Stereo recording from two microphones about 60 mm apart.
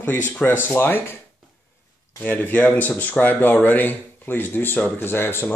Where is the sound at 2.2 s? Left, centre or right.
Left.